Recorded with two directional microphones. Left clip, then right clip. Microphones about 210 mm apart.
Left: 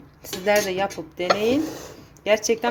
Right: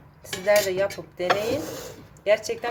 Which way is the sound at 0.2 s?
50° left (ahead or behind).